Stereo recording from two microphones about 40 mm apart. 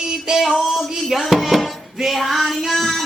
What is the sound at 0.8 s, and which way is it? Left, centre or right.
Music, centre.